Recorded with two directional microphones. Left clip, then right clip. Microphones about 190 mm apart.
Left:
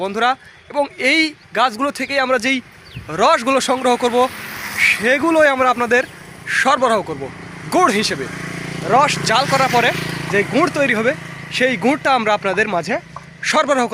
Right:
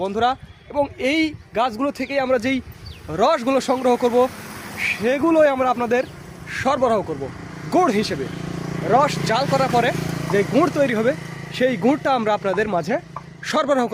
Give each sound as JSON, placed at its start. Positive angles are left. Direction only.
{"t": 0.0, "sound": "speech", "side_deg": 10}
{"t": 8.2, "sound": "vehicle", "side_deg": 30}
{"t": 8.9, "sound": "speech", "side_deg": 10}
{"t": 9.9, "sound": "vehicle", "side_deg": -55}
{"t": 10.5, "sound": "speech", "side_deg": 5}